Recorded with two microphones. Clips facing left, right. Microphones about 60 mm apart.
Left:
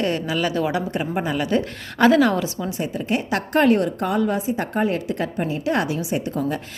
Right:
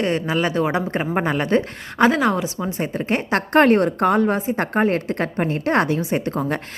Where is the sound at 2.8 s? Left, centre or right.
Right.